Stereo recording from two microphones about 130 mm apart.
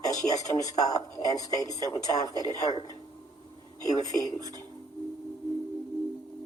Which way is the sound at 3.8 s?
30° left (ahead or behind).